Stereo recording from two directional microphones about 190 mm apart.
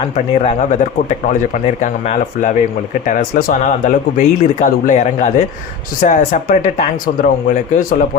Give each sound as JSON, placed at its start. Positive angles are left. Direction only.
{"t": 0.0, "sound": "speech", "side_deg": 35}